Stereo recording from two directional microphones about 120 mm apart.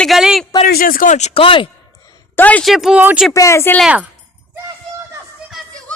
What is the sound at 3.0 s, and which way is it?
Speech, 15° right (ahead or behind).